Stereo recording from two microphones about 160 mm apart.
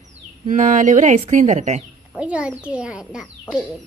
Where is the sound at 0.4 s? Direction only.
55° right (ahead or behind).